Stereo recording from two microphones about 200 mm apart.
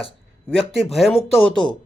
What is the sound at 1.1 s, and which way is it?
Speech, 30° left (ahead or behind).